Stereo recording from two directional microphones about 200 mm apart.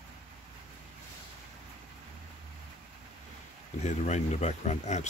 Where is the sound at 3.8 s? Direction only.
35° left (ahead or behind).